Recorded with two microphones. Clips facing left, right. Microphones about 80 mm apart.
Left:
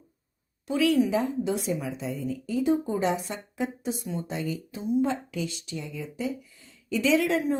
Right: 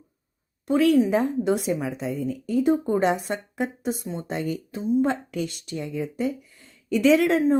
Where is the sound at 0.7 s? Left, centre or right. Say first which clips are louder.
Right 4 dB; right.